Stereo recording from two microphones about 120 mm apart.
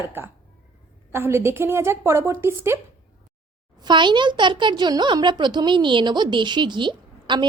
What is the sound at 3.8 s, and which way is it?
A child's voice, 40° right (ahead or behind).